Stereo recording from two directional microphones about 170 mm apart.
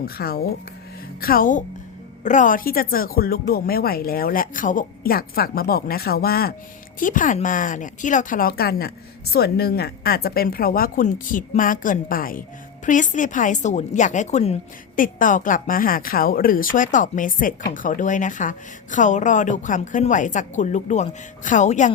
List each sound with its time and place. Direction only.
0.0 s speech: 65° left (ahead or behind)
7.0 s speech: 50° left (ahead or behind)
14.9 s speech: 50° left (ahead or behind)